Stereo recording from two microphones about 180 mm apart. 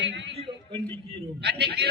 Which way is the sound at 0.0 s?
80° right.